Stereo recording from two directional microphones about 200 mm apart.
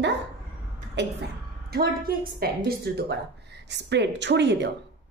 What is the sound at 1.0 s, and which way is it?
Speech, 60° right (ahead or behind).